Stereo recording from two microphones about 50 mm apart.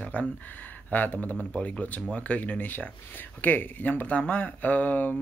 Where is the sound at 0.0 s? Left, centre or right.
Left.